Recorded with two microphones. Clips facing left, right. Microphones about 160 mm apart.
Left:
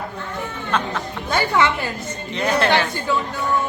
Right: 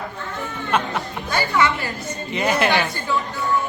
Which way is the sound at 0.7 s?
10° right (ahead or behind).